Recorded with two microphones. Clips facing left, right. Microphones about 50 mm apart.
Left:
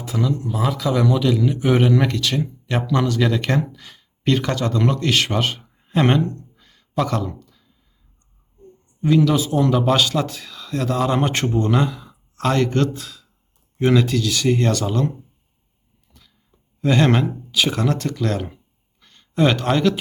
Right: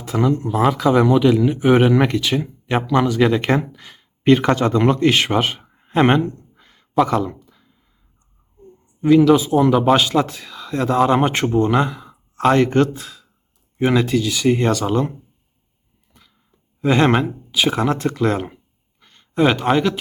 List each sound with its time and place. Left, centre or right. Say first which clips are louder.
0.0 s speech: right 4 dB; right
0.9 s a man's voice: right 4 dB; right
5.6 s a sound: right 3 dB; right
7.0 s speech: right 5 dB; centre
9.0 s a man's voice: right 5 dB; centre
16.8 s speech: right 2 dB; centre